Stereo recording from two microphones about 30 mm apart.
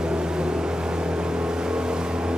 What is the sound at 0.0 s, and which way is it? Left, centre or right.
Vehicle, right.